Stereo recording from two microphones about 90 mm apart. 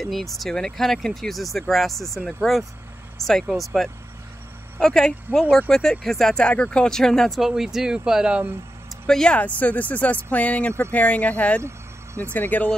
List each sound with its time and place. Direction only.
0.0 s speech: centre (ahead or behind)
9.0 s speech: 10° left (ahead or behind)